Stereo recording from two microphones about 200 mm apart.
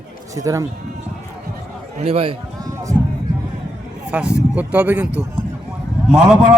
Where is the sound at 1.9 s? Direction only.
30° right (ahead or behind).